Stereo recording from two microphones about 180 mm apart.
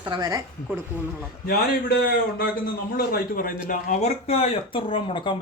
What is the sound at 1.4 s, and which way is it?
Speech, 55° left (ahead or behind).